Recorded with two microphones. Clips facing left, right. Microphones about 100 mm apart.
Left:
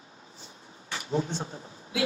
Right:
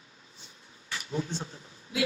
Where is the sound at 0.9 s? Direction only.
30° left (ahead or behind).